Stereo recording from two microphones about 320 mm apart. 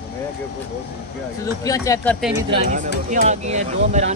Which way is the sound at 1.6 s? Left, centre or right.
Centre.